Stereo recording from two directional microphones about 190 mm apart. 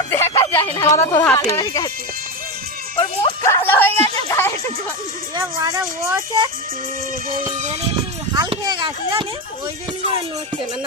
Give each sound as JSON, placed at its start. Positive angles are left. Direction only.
{"t": 0.1, "sound": "speech", "side_deg": 15}
{"t": 3.0, "sound": "music", "side_deg": 25}
{"t": 3.7, "sound": "a woman's voice", "side_deg": 10}
{"t": 5.4, "sound": "speech", "side_deg": -15}
{"t": 8.4, "sound": "speech", "side_deg": -20}